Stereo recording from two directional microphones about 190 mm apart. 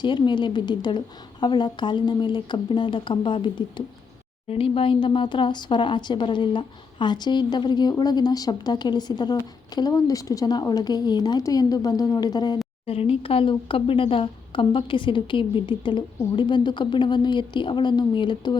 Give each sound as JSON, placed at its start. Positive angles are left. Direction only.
{"t": 0.0, "sound": "speech", "side_deg": 25}